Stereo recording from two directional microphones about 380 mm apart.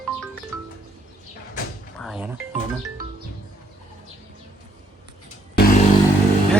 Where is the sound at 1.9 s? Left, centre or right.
Centre.